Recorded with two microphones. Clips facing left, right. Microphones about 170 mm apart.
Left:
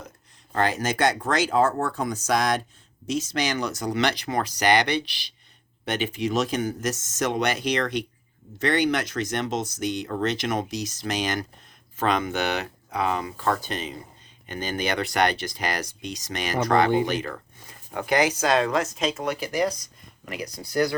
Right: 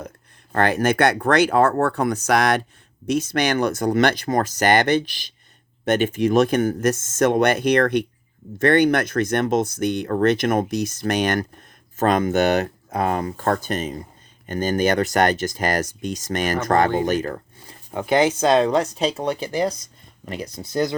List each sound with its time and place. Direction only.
0.5 s speech: 60° right (ahead or behind)
11.9 s speech: 45° right (ahead or behind)
17.9 s speech: 25° right (ahead or behind)